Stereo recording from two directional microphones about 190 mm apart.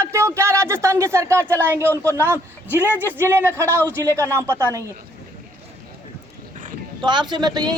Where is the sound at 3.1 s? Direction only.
10° right (ahead or behind).